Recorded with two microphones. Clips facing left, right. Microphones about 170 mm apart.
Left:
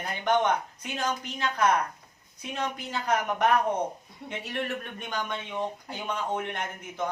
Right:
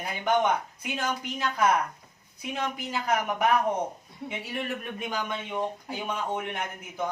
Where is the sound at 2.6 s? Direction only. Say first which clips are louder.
Even; 10° right (ahead or behind).